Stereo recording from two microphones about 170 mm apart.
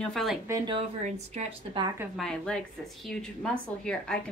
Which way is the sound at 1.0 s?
35° right (ahead or behind).